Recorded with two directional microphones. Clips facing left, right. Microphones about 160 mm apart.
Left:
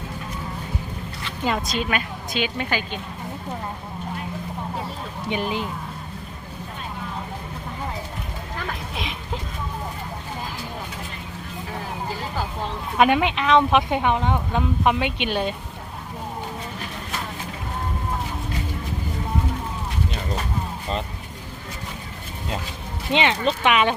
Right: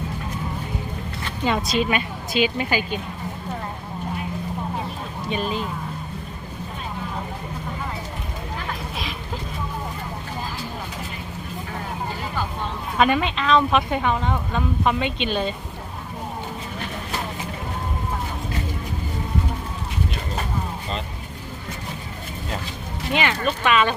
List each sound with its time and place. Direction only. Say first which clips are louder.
2.3 s a woman's voice: right 4 dB; 5° right (ahead or behind)
5.3 s speech: even; 15° left (ahead or behind)
13.0 s speech: left 2 dB; 15° left (ahead or behind)
23.1 s speech: left 2 dB; 20° left (ahead or behind)